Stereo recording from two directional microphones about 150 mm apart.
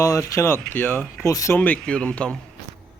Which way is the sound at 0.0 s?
20° left (ahead or behind).